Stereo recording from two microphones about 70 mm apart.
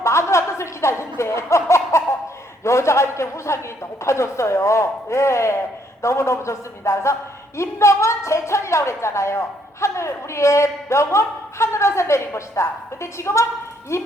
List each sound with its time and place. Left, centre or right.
0.0 s chuckle: left
2.6 s a man's voice: left